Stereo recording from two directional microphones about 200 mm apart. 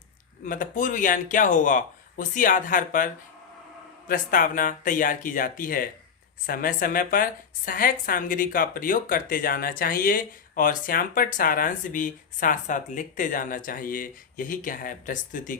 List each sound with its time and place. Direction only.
0.4 s speech: 40° left (ahead or behind)
4.1 s a woman's voice: 45° left (ahead or behind)